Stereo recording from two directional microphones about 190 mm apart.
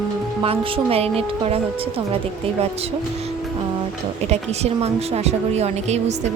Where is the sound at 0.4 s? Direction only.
30° right (ahead or behind).